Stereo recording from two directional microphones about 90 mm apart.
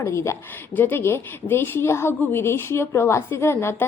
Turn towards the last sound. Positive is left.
turn(degrees=30)  # may be behind; listen again after turning